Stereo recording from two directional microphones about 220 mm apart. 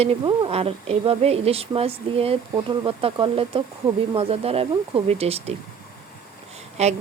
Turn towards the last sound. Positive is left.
turn(degrees=-30)  # may be behind; listen again after turning